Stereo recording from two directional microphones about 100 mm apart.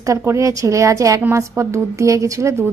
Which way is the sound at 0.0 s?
30° right (ahead or behind).